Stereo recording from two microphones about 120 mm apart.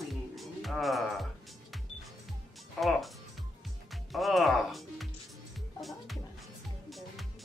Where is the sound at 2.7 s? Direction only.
Centre (ahead or behind).